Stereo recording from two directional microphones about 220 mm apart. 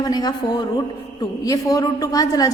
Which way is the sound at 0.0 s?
20° left (ahead or behind).